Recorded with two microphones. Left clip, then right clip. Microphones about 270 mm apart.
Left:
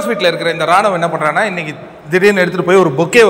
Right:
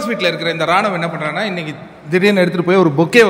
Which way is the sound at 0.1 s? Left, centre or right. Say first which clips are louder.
Left 4 dB; centre.